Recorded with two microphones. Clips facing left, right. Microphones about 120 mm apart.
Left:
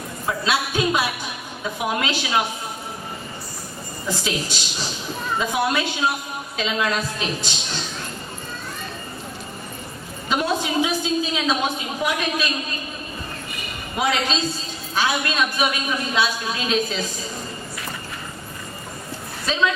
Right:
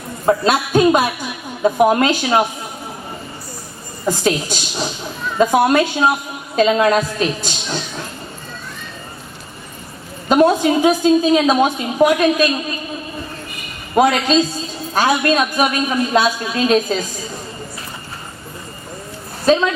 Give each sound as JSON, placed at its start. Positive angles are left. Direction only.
{"t": 0.3, "sound": "a woman's voice", "side_deg": -45}
{"t": 4.0, "sound": "a woman's voice", "side_deg": -50}
{"t": 10.2, "sound": "a woman's voice", "side_deg": -50}
{"t": 13.9, "sound": "a woman's voice", "side_deg": -50}
{"t": 19.5, "sound": "a woman's voice", "side_deg": -45}